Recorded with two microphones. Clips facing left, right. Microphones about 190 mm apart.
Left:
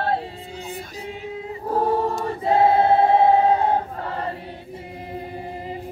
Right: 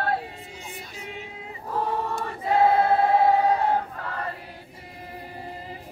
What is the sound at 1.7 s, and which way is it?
Choir, 35° left (ahead or behind).